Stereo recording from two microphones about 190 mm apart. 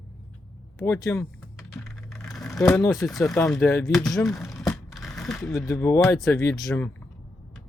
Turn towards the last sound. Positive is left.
turn(degrees=15)  # may be behind; listen again after turning